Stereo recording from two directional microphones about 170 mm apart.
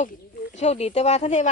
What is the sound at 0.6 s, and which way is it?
Speech, 40° left (ahead or behind).